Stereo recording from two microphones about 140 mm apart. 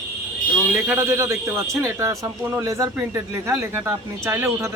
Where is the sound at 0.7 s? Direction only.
15° right (ahead or behind).